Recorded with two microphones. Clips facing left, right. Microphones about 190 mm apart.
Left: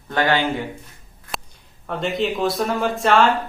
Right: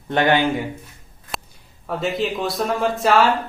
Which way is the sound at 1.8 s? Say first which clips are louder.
Even; centre (ahead or behind).